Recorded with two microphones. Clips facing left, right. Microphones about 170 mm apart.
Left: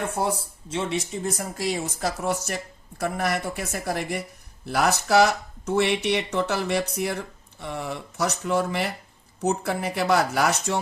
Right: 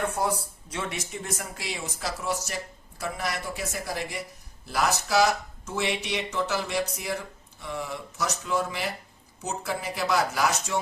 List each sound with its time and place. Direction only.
0.2 s speech: 25° left (ahead or behind); by 10.8 s 60° left (ahead or behind)